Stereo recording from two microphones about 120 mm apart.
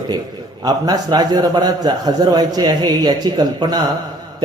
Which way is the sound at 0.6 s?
35° right (ahead or behind).